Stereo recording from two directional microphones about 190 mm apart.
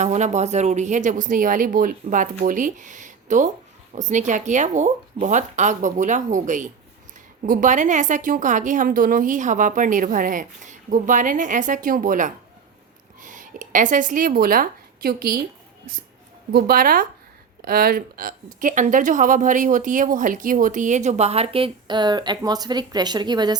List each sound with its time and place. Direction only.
0.0 s a woman's voice: 40° right (ahead or behind)
16.5 s a woman's voice: 55° right (ahead or behind); by 23.6 s 20° right (ahead or behind)